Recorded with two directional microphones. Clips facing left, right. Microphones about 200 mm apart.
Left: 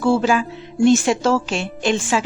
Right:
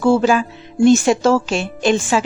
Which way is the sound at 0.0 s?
45° right (ahead or behind).